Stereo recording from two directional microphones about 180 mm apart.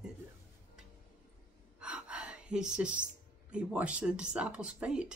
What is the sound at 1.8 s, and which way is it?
A woman's voice, 5° right (ahead or behind).